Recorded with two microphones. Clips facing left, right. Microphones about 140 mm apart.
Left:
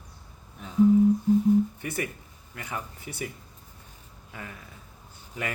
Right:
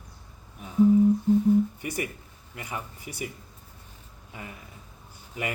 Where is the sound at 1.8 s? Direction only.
10° right (ahead or behind).